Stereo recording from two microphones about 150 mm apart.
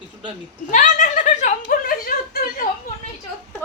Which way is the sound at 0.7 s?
55° left (ahead or behind).